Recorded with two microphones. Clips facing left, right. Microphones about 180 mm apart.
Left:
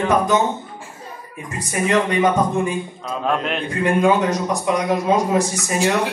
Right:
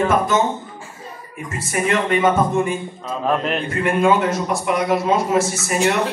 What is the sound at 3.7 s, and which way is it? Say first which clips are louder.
A man's voice: left 1 dB; 15° left (ahead or behind).